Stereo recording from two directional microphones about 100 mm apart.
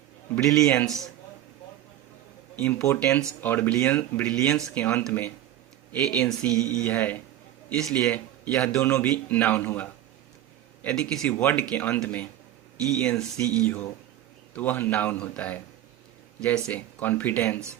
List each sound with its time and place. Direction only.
0.3 s speech: 5° left (ahead or behind)
2.6 s speech: 15° left (ahead or behind)
5.9 s speech: 10° left (ahead or behind)